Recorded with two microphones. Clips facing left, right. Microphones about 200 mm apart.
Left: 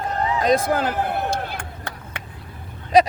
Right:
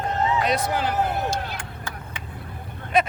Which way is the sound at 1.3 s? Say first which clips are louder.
Left 2 dB; 60° left (ahead or behind).